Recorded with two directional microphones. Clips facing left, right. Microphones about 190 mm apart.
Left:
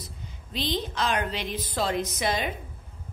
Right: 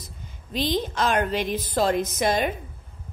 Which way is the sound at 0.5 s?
45° right (ahead or behind).